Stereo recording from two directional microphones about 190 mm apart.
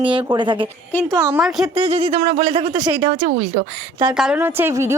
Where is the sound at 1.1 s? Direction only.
15° right (ahead or behind).